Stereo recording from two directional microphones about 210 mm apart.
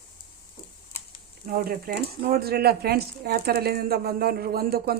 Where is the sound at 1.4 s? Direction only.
45° right (ahead or behind).